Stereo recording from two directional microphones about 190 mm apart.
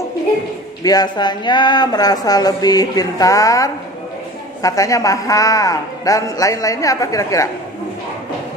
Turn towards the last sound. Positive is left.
turn(degrees=15)  # may be behind; listen again after turning